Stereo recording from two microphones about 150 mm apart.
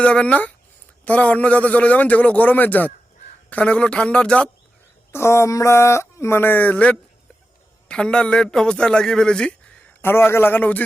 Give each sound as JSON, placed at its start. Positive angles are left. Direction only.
{"t": 0.0, "sound": "a man's voice", "side_deg": 10}
{"t": 5.1, "sound": "a man's voice", "side_deg": 20}